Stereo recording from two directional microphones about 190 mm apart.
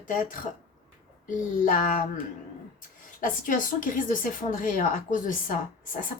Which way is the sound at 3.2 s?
45° left (ahead or behind).